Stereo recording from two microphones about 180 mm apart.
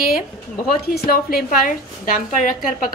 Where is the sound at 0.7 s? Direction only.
55° left (ahead or behind).